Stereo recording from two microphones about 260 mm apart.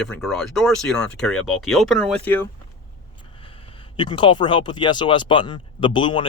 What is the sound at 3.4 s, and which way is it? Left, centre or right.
Speech, left.